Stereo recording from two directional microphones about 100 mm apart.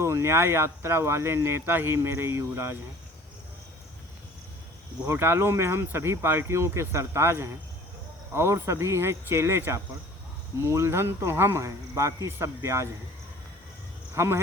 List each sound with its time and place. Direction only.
0.0 s speech: 25° right (ahead or behind)
5.0 s speech: 20° right (ahead or behind)
14.2 s speech: 25° right (ahead or behind)